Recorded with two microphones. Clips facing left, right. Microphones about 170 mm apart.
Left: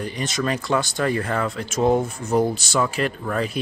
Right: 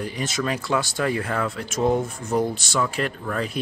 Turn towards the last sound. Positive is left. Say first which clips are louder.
# left 2 dB
turn(degrees=0)  # may be behind; listen again after turning